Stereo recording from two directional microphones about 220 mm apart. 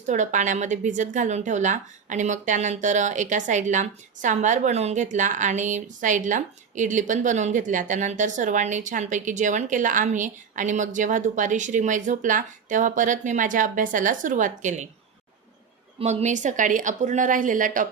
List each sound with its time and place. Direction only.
0.1 s a woman's voice: 35° right (ahead or behind)
16.0 s a woman's voice: 30° right (ahead or behind)